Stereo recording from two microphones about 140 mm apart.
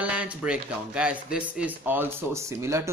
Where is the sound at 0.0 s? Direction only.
10° right (ahead or behind).